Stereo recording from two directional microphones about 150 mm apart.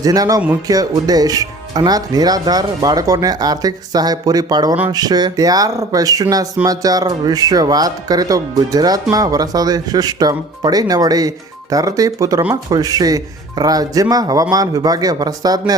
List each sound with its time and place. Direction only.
0.0 s speech: 25° right (ahead or behind)